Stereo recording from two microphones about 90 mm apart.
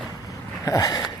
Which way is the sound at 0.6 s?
45° left (ahead or behind).